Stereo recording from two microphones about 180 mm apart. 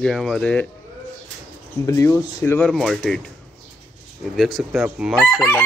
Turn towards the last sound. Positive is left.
turn(degrees=0)  # may be behind; listen again after turning